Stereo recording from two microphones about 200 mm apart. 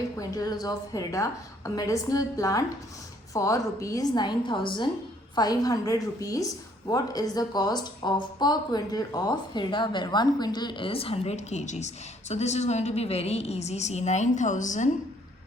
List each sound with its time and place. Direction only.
0.2 s a woman's voice: 15° left (ahead or behind); by 14.8 s 40° left (ahead or behind)